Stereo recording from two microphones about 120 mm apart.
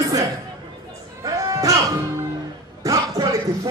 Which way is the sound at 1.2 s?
30° right (ahead or behind).